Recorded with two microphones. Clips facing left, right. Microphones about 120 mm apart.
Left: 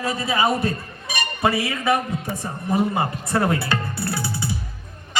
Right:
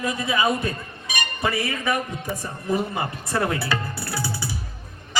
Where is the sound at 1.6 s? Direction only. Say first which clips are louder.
Left 4 dB; 30° left (ahead or behind).